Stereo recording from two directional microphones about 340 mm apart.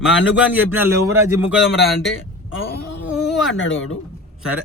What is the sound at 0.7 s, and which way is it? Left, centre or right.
Speech, centre.